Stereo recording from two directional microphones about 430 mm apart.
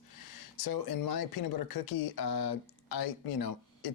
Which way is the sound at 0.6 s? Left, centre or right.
Left.